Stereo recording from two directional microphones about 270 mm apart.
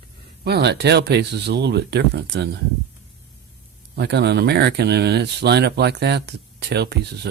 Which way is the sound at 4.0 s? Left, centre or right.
Right.